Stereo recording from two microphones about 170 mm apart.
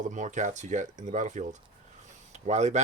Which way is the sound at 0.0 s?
45° right (ahead or behind).